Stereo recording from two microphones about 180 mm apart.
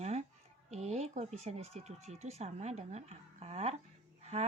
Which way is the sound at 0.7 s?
35° right (ahead or behind).